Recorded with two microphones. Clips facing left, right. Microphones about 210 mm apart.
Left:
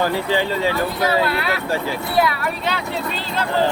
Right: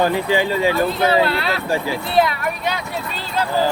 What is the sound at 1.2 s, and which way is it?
Speech, 30° right (ahead or behind).